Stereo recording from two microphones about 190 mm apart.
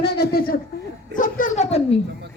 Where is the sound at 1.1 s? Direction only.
45° left (ahead or behind).